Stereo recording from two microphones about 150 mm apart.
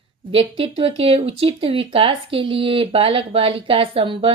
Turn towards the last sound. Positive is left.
turn(degrees=-35)  # may be behind; listen again after turning